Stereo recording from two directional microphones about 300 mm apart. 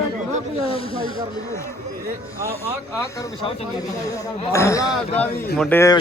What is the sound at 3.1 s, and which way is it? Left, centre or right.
Speech, centre.